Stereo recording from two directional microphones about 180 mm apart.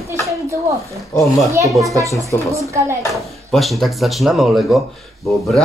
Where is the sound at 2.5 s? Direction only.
15° right (ahead or behind).